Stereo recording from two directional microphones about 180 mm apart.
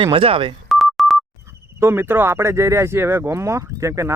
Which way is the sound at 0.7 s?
Centre (ahead or behind).